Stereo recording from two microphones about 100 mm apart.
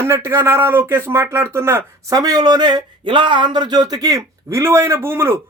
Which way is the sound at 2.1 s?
35° right (ahead or behind).